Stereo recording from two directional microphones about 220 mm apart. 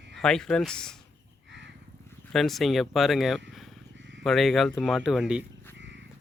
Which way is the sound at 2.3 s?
Centre (ahead or behind).